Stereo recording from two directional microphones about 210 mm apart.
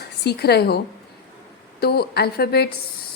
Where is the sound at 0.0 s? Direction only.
50° left (ahead or behind).